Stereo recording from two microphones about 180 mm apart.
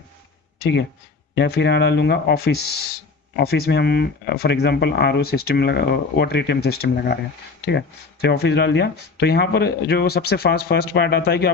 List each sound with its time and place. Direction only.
1.4 s speech: 65° left (ahead or behind)